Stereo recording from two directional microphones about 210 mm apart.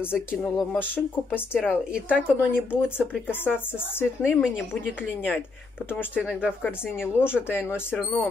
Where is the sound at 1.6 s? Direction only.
5° right (ahead or behind).